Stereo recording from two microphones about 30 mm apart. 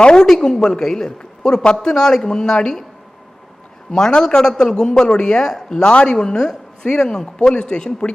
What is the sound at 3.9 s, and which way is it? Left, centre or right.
A man's voice, left.